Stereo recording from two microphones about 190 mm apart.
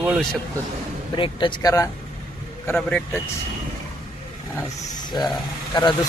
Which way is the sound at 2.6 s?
10° left (ahead or behind).